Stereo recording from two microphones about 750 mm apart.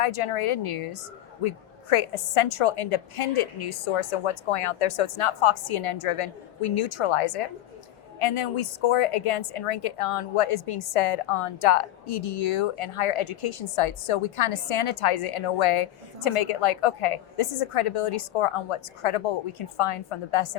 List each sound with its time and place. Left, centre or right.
0.0 s a woman's voice: left